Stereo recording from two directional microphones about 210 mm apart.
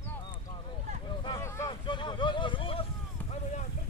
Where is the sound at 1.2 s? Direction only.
15° left (ahead or behind).